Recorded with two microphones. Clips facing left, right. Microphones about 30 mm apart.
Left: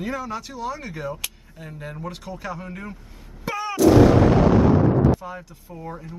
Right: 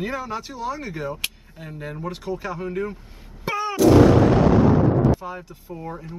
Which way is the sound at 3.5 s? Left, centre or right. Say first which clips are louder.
Right 1 dB; centre.